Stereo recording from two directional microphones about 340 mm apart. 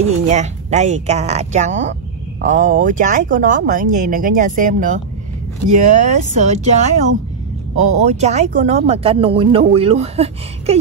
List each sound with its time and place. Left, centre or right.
0.3 s speech: centre
7.8 s speech: centre